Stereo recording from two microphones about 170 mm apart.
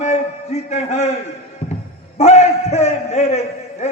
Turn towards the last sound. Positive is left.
turn(degrees=40)  # may be behind; listen again after turning